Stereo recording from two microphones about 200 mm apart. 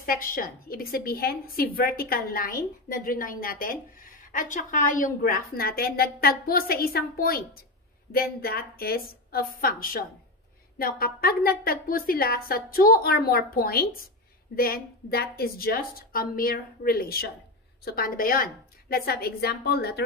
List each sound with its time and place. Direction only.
0.0 s a woman's voice: 45° left (ahead or behind)